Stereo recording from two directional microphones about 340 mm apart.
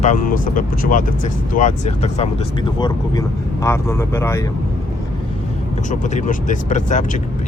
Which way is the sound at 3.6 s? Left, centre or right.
Centre.